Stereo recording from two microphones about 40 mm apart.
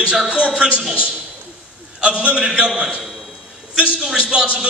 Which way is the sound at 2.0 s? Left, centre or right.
Right.